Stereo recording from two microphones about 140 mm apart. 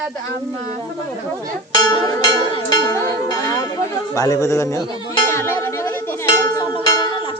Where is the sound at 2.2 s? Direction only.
30° left (ahead or behind).